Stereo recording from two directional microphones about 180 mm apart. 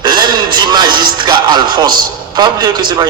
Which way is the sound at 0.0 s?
25° right (ahead or behind).